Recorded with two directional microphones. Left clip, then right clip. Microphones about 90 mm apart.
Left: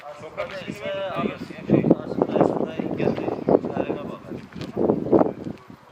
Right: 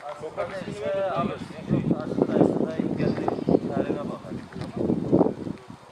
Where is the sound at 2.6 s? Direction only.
30° left (ahead or behind).